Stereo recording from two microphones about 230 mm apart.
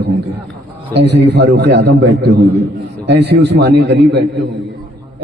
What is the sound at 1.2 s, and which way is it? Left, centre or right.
A man's voice, right.